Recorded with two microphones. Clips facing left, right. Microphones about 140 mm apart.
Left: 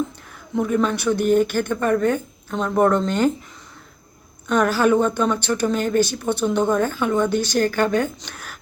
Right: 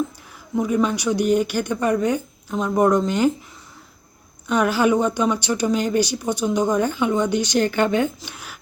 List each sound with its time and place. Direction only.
0.5 s speech: 10° right (ahead or behind)
1.2 s speech: 50° left (ahead or behind)
1.5 s speech: 15° right (ahead or behind)
4.4 s a woman's voice: 10° right (ahead or behind)
8.2 s speech: 10° right (ahead or behind)